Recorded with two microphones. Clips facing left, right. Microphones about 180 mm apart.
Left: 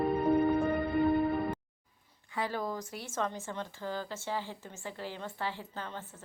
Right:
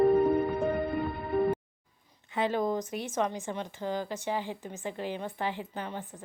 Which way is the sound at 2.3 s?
20° right (ahead or behind).